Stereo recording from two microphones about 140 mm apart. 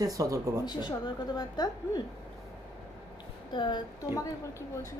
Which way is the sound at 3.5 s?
35° left (ahead or behind).